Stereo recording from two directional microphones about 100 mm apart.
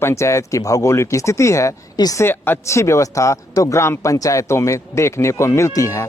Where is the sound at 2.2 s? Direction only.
25° left (ahead or behind).